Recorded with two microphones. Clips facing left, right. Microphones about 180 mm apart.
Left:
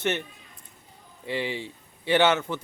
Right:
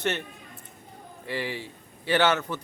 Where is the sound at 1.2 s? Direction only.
20° left (ahead or behind).